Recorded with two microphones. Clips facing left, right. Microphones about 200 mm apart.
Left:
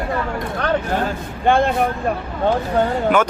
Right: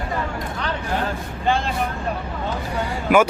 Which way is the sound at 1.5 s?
55° left (ahead or behind).